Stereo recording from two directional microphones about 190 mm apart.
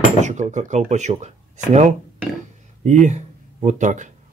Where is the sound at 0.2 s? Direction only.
40° right (ahead or behind).